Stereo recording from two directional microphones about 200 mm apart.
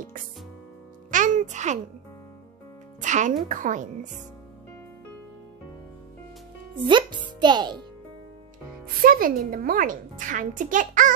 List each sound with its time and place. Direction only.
1.1 s music: 40° right (ahead or behind)
3.0 s a woman's voice: 40° right (ahead or behind)
6.8 s a child's voice: 25° right (ahead or behind)
9.0 s a woman's voice: 45° right (ahead or behind)